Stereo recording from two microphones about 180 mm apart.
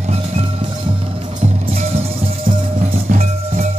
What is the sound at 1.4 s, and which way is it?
Music, 40° right (ahead or behind).